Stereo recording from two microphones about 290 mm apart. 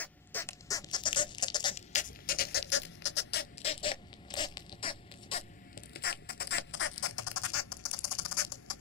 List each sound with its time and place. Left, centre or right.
0.0 s rodents: centre; by 3.4 s left
3.6 s rodents: centre
5.9 s rodents: left
7.3 s a sound: left